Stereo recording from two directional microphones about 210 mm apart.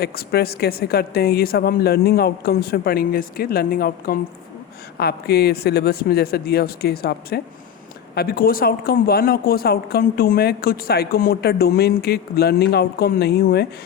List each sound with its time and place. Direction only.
0.0 s speech: 50° left (ahead or behind)